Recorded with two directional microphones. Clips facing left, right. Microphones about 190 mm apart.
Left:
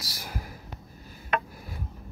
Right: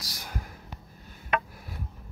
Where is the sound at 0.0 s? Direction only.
5° left (ahead or behind).